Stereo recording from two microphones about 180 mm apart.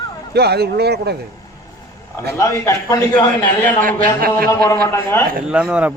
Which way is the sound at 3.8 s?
55° right (ahead or behind).